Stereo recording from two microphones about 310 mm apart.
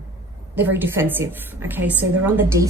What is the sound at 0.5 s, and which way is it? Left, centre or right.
Speech, centre.